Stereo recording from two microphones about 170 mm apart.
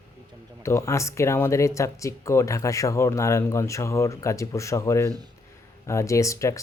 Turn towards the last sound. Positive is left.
turn(degrees=20)  # may be behind; listen again after turning